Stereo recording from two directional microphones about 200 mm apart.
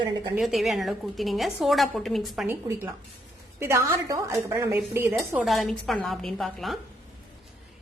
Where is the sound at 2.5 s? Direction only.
10° right (ahead or behind).